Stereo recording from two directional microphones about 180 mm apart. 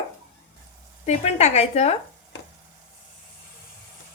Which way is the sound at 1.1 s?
40° left (ahead or behind).